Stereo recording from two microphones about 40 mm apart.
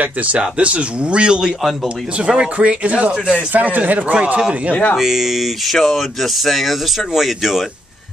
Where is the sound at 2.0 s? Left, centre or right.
Right.